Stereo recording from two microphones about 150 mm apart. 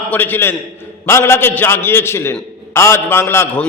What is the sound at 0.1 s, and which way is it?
A man's voice, 15° left (ahead or behind).